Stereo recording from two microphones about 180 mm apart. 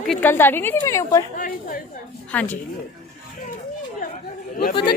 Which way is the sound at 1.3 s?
50° left (ahead or behind).